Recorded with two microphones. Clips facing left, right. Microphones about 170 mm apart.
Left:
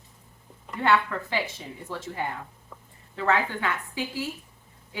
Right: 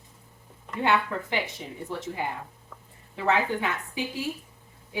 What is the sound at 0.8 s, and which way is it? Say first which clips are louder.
Speech: left 1 dB; 20° right (ahead or behind).